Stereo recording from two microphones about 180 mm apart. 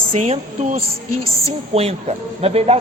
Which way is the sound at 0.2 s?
40° right (ahead or behind).